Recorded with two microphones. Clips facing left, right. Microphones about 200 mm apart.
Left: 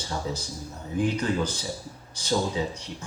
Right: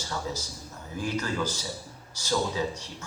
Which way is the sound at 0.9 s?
20° left (ahead or behind).